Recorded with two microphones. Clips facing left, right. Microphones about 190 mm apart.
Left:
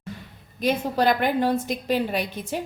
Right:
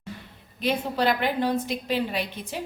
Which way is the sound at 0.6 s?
45° left (ahead or behind).